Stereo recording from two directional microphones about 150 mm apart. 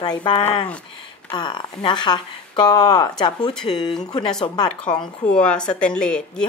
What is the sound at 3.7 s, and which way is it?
A woman's voice, 30° left (ahead or behind).